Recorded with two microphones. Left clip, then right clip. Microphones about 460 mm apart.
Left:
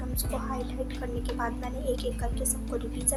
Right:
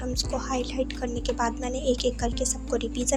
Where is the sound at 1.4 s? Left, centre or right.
Left.